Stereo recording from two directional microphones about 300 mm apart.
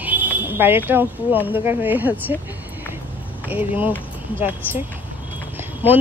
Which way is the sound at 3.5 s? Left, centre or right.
Centre.